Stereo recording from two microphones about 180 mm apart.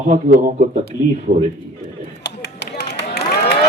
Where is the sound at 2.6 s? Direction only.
65° left (ahead or behind).